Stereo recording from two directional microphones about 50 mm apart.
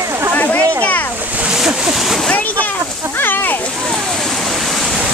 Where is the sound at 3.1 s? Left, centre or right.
Left.